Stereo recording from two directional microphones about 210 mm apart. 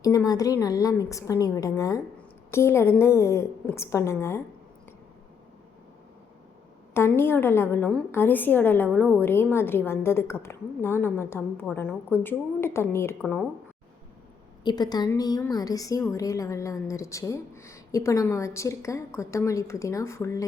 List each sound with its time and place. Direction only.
0.3 s a woman's voice: 15° left (ahead or behind)
6.9 s a woman's voice: 10° left (ahead or behind)
14.6 s a woman's voice: 20° left (ahead or behind)